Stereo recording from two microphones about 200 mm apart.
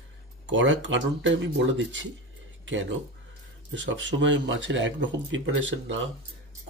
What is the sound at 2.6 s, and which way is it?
Speech, 70° right (ahead or behind).